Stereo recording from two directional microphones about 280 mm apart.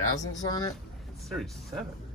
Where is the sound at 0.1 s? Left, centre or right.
Centre.